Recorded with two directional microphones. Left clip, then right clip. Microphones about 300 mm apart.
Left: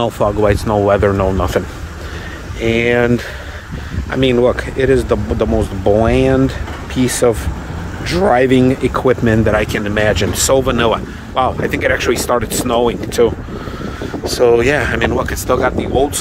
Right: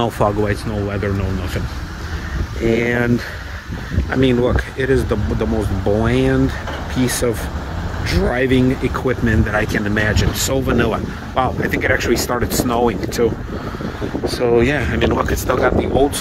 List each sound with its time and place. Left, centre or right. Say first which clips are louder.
0.0 s speech: left 3 dB; centre
0.5 s speech: left 10 dB; centre
2.6 s speech: left 4 dB; centre
4.1 s speech: left 4 dB; centre
14.4 s speech: left 5 dB; centre